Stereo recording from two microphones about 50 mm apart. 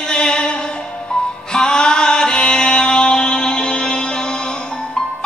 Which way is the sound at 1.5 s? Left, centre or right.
Centre.